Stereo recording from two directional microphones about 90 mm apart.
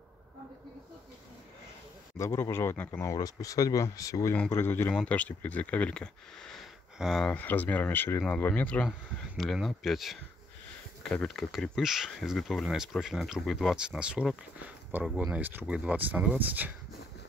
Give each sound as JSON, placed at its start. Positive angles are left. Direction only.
{"t": 2.1, "sound": "speech", "side_deg": 30}
{"t": 2.9, "sound": "speech", "side_deg": 40}
{"t": 7.2, "sound": "speech", "side_deg": 20}
{"t": 9.4, "sound": "speech", "side_deg": 5}
{"t": 14.6, "sound": "speech", "side_deg": -25}